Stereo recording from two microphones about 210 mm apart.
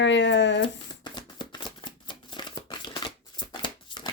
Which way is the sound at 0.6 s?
20° left (ahead or behind).